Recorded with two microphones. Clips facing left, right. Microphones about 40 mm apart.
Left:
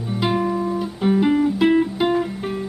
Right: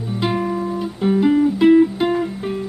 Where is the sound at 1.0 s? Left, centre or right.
Centre.